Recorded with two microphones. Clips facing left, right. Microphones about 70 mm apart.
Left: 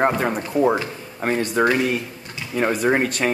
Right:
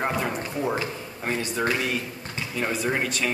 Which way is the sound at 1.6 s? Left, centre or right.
Left.